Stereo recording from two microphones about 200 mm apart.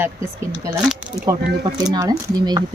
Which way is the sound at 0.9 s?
10° right (ahead or behind).